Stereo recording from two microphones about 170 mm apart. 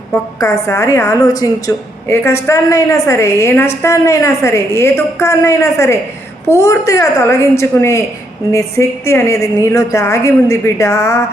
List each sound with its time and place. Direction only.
0.7 s a woman's voice: 15° left (ahead or behind)